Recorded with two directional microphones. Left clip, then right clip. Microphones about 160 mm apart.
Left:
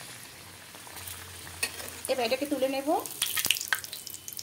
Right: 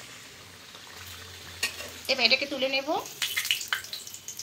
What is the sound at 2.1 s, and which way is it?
Speech, 40° left (ahead or behind).